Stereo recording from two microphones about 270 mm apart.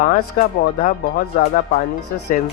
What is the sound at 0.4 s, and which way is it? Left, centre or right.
Speech, left.